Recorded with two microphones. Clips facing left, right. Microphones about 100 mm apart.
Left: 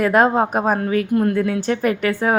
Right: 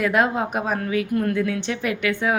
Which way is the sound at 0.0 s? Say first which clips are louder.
Left 5 dB; 40° left (ahead or behind).